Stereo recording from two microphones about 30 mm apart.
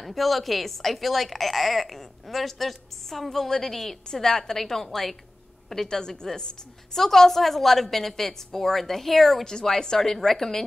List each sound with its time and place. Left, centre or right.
0.0 s a woman's voice: centre